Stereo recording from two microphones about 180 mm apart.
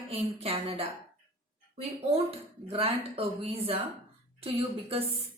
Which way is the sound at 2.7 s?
35° right (ahead or behind).